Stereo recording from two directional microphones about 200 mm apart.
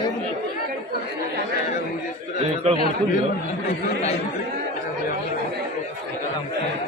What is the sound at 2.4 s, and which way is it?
Speech, 30° right (ahead or behind).